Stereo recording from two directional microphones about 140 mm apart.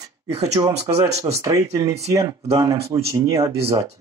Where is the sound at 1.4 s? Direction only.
20° right (ahead or behind).